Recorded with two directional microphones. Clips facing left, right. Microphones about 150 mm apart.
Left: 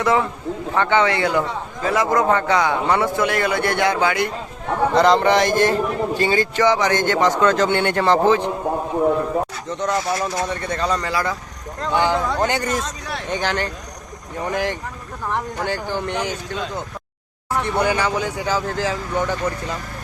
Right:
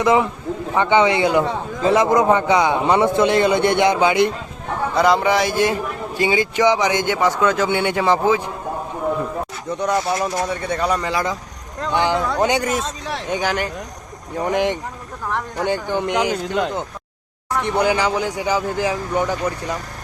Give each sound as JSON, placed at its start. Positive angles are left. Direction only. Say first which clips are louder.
{"t": 0.0, "sound": "a man's voice", "louder": "right 2 dB", "side_deg": -15}
{"t": 4.9, "sound": "a man's voice", "louder": "left 1 dB", "side_deg": -10}
{"t": 9.6, "sound": "a man's voice", "louder": "right 2 dB", "side_deg": -10}
{"t": 12.4, "sound": "a man's voice", "louder": "right 2 dB", "side_deg": -10}
{"t": 16.3, "sound": "speech", "louder": "right 6 dB", "side_deg": -65}
{"t": 17.7, "sound": "a man's voice", "louder": "right 2 dB", "side_deg": -15}